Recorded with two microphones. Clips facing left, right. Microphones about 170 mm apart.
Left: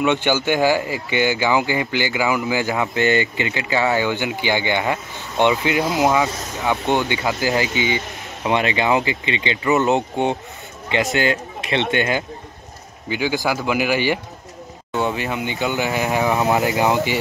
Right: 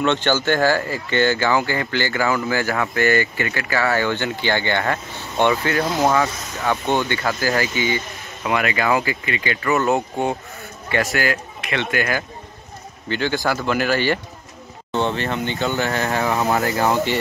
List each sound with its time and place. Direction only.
0.0 s speech: 10° left (ahead or behind)
13.1 s speech: 10° left (ahead or behind)